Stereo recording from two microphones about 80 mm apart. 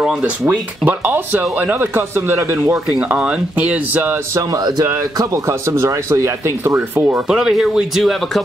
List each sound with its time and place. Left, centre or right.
0.2 s speech: right
3.0 s speech: centre
4.4 s speech: right
5.5 s speech: right
7.2 s speech: centre